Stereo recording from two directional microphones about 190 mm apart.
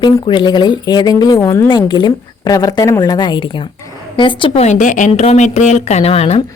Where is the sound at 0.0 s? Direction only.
25° left (ahead or behind).